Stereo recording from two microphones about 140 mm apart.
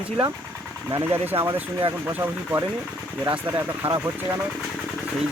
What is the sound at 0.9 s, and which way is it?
Speech, 15° right (ahead or behind).